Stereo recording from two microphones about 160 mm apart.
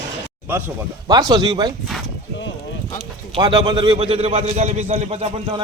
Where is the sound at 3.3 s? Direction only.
30° right (ahead or behind).